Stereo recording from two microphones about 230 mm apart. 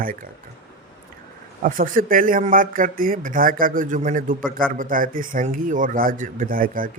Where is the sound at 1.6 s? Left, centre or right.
Right.